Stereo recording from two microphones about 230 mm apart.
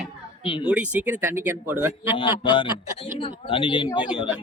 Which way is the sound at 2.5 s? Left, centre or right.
Left.